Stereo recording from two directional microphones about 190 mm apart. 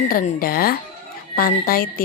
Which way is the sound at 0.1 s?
50° left (ahead or behind).